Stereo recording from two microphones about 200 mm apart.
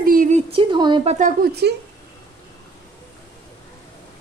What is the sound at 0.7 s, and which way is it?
Speech, 25° right (ahead or behind).